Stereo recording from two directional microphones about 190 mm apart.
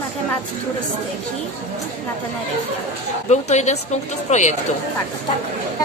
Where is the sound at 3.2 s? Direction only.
35° left (ahead or behind).